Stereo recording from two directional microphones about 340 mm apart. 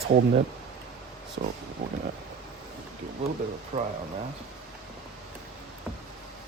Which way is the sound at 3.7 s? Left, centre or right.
Centre.